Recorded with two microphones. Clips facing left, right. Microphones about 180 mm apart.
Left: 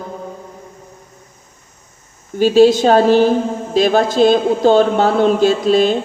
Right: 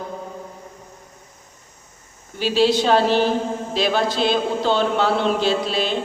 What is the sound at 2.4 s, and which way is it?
A woman's voice, 45° left (ahead or behind).